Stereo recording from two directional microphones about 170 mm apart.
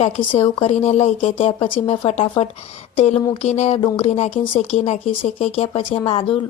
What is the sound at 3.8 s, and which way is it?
Speech, 30° left (ahead or behind).